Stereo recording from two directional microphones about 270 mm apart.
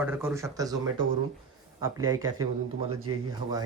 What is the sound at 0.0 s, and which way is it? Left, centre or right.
Speech, centre.